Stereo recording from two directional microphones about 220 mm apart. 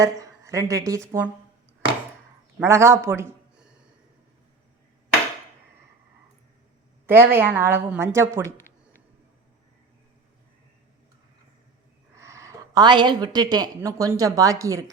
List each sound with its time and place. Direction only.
0.0 s a woman's voice: 15° right (ahead or behind)
2.6 s speech: 10° right (ahead or behind)
7.1 s a woman's voice: 10° right (ahead or behind)
12.1 s a woman's voice: 15° right (ahead or behind)